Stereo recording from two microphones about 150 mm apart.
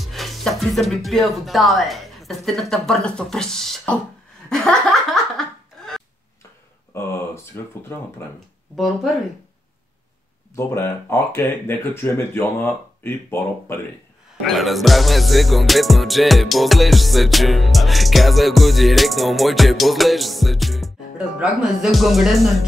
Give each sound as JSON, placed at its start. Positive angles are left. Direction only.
{"t": 0.0, "sound": "speech", "side_deg": 0}
{"t": 4.5, "sound": "chuckle", "side_deg": 5}
{"t": 5.8, "sound": "a sound", "side_deg": 5}
{"t": 6.9, "sound": "speech", "side_deg": 15}
{"t": 10.5, "sound": "speech", "side_deg": 15}
{"t": 14.4, "sound": "music", "side_deg": 0}